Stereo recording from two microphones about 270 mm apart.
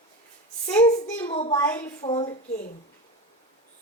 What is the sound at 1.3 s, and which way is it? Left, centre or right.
Speech, left.